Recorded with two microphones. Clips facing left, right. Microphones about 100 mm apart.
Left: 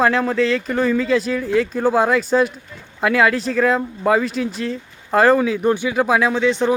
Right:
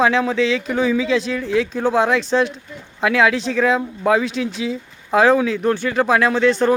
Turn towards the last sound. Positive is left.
turn(degrees=10)  # may be behind; listen again after turning